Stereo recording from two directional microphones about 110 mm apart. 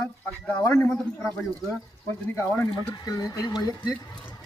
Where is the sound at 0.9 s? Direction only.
Centre (ahead or behind).